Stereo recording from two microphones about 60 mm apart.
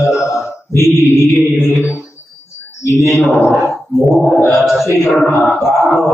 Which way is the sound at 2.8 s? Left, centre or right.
Left.